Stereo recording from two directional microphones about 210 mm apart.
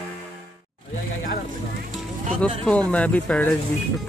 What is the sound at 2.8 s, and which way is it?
Speech, 5° left (ahead or behind).